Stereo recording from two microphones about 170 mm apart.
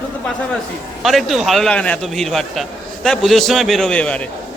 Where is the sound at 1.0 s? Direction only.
Centre (ahead or behind).